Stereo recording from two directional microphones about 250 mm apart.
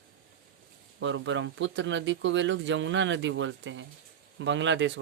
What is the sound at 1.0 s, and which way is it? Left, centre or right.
Speech, right.